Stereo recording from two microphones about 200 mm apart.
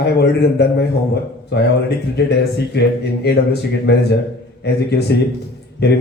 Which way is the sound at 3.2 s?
55° left (ahead or behind).